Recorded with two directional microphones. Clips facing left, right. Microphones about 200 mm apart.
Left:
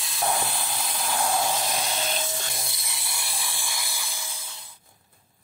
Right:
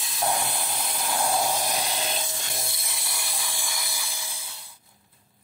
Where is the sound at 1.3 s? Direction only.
10° right (ahead or behind).